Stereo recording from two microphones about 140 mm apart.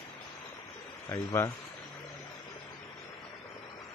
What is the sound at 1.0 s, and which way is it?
Speech, 20° left (ahead or behind).